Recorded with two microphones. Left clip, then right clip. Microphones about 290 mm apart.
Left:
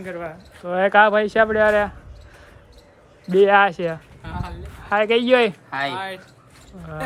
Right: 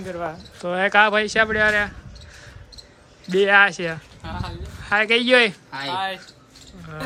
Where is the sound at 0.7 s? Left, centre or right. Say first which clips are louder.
Left 2 dB; centre.